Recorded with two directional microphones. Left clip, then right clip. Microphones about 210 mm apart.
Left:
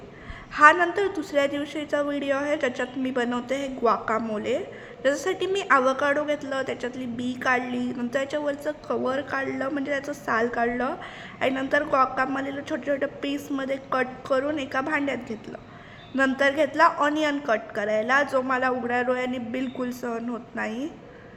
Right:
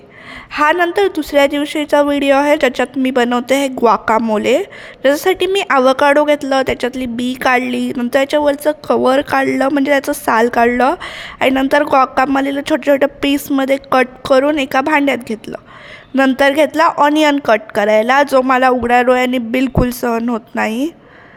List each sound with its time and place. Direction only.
0.5 s speech: 45° right (ahead or behind)